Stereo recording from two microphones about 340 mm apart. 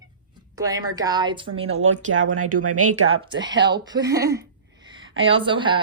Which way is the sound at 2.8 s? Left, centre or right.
Right.